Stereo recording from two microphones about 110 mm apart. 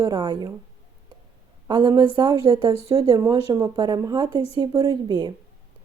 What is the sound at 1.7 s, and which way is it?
A woman's voice, 45° right (ahead or behind).